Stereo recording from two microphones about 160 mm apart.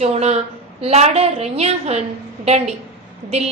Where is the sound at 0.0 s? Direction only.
45° right (ahead or behind).